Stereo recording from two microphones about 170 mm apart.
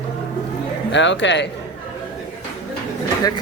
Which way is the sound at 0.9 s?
90° left.